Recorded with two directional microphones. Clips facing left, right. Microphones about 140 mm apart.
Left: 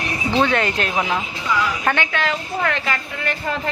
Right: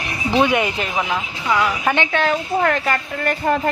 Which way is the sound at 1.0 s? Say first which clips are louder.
Right 1 dB; 5° left (ahead or behind).